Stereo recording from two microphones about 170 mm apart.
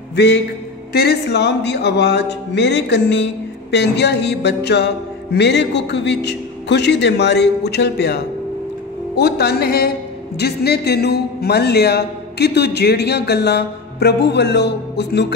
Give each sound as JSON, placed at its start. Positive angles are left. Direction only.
{"t": 0.1, "sound": "music", "side_deg": 90}
{"t": 0.9, "sound": "a man's voice", "side_deg": 75}
{"t": 3.7, "sound": "a man's voice", "side_deg": 80}